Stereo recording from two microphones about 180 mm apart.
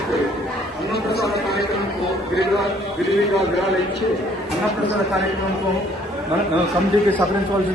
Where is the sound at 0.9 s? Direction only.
60° left (ahead or behind).